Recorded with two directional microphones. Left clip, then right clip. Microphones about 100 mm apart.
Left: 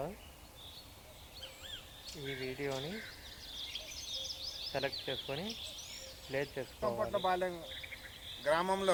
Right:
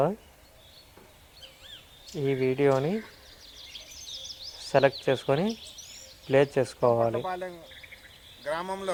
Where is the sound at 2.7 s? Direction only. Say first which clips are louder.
Right 15 dB; 30° right (ahead or behind).